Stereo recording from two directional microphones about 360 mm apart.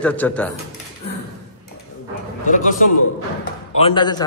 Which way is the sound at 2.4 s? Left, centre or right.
Left.